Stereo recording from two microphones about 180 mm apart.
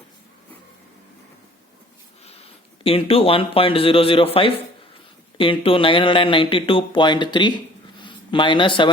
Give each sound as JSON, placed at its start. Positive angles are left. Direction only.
{"t": 2.8, "sound": "a man's voice", "side_deg": 30}